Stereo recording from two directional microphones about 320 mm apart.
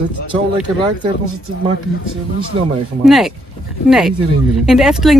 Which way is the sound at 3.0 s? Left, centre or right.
Centre.